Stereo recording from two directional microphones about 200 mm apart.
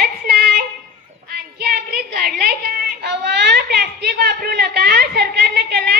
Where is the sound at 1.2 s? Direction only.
50° right (ahead or behind).